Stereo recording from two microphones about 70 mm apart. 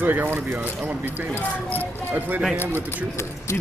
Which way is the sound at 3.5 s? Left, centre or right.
Left.